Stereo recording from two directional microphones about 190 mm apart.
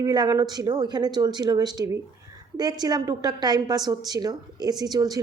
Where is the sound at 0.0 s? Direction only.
20° right (ahead or behind).